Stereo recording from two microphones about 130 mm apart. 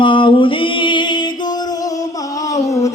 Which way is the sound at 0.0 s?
40° left (ahead or behind).